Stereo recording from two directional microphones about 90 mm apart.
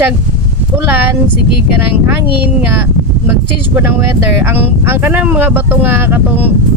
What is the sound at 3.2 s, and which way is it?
Speech, 20° right (ahead or behind).